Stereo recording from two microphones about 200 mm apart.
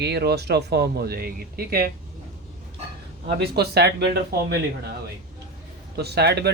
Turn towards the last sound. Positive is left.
turn(degrees=-55)  # may be behind; listen again after turning